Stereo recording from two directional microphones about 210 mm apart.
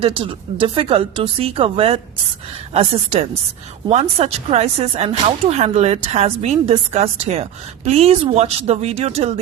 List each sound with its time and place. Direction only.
0.0 s speech: 25° right (ahead or behind)